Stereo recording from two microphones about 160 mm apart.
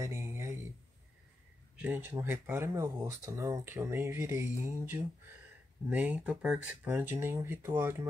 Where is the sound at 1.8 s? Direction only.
10° right (ahead or behind).